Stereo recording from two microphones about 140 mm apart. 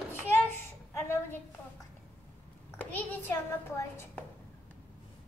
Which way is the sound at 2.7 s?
15° left (ahead or behind).